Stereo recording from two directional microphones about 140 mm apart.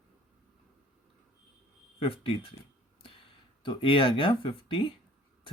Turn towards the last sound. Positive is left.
turn(degrees=40)  # may be behind; listen again after turning